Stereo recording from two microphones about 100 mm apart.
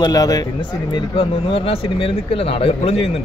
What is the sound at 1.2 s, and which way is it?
A man's voice, 70° left (ahead or behind).